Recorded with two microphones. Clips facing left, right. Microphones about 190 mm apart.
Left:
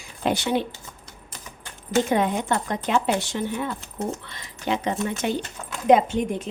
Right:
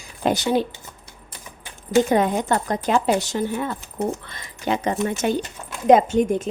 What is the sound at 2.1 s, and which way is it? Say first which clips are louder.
A woman's voice: right 3 dB; 40° right (ahead or behind).